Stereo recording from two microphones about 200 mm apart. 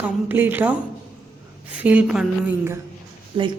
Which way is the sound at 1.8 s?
5° right (ahead or behind).